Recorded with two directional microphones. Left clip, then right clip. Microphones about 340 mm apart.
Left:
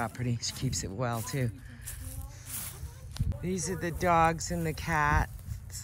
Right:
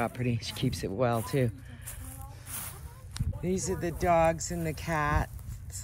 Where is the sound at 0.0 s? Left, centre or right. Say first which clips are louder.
Right 2 dB; centre.